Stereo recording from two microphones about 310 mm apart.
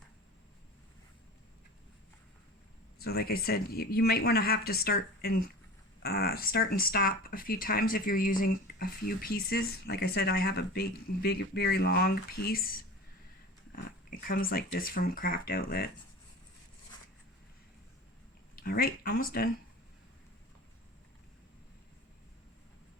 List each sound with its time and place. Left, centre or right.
3.0 s speech: left
18.5 s speech: left